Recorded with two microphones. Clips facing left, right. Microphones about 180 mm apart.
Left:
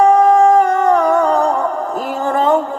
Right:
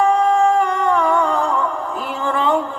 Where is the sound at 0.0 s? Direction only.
40° left (ahead or behind).